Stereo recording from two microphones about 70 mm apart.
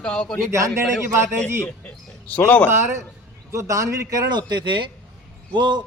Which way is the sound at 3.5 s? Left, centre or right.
Right.